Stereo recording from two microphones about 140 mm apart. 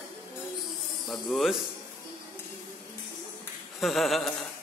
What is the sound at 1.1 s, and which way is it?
Speech, centre (ahead or behind).